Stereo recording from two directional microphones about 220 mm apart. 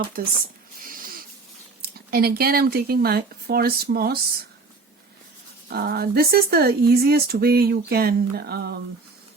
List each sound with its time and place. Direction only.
1.8 s speech: 45° right (ahead or behind)
5.7 s speech: 45° right (ahead or behind)